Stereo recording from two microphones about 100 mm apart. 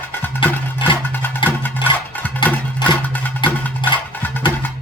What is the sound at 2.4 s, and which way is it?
Music, 45° left (ahead or behind).